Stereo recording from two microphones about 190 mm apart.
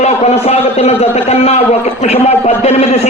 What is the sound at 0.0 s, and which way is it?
A man's voice, 35° left (ahead or behind).